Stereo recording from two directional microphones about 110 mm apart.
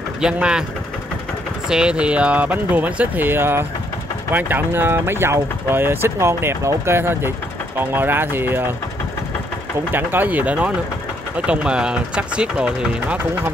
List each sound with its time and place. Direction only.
0.2 s speech: 10° right (ahead or behind)
1.7 s speech: 10° right (ahead or behind)
9.9 s speech: 15° right (ahead or behind)